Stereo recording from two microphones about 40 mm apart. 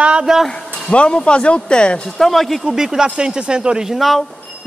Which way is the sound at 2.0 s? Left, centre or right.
Centre.